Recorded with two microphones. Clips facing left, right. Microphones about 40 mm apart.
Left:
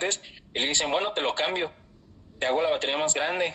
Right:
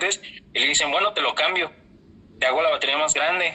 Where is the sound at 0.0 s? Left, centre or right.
Right.